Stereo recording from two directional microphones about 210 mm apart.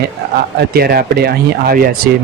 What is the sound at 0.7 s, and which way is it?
A man's voice, 50° right (ahead or behind).